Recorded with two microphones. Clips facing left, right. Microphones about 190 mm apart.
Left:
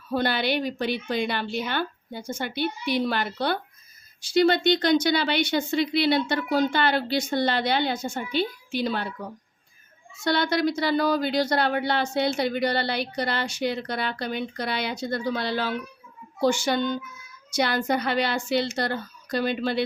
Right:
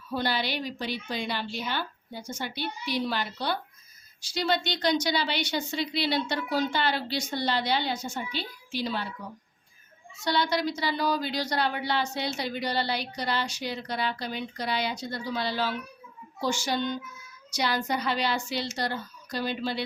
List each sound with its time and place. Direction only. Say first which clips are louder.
0.1 s speech: left 5 dB; 55° left (ahead or behind)
10.2 s speech: left 4 dB; 55° left (ahead or behind)